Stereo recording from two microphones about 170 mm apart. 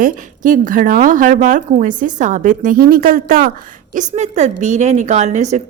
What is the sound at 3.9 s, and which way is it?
A woman's voice, 45° right (ahead or behind).